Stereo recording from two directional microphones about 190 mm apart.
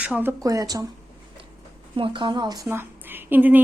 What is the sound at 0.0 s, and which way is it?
Speech, 10° right (ahead or behind).